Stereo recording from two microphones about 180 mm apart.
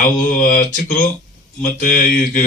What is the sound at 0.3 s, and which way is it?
Speech, 45° left (ahead or behind).